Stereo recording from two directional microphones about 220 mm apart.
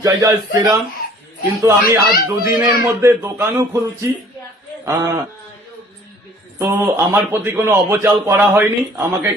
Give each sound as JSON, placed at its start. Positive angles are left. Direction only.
{"t": 0.0, "sound": "a man's voice", "side_deg": -15}
{"t": 4.9, "sound": "a man's voice", "side_deg": -15}
{"t": 6.6, "sound": "a man's voice", "side_deg": -10}